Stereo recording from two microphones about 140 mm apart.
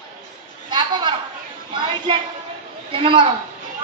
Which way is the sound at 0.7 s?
35° right (ahead or behind).